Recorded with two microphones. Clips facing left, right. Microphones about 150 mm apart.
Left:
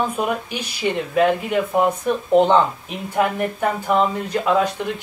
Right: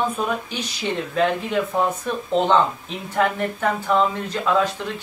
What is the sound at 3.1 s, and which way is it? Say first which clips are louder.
Speech: left 1 dB; 10° left (ahead or behind).